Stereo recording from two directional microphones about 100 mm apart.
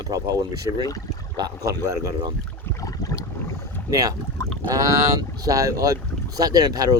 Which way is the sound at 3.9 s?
35° right (ahead or behind).